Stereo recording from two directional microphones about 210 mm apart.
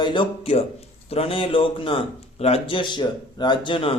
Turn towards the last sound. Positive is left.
turn(degrees=25)  # may be behind; listen again after turning